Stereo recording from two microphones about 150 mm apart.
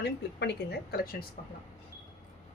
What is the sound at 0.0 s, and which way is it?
A woman's voice, 90° left.